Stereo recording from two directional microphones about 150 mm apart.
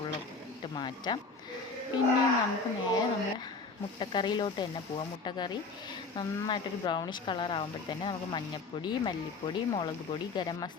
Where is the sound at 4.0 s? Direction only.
30° left (ahead or behind).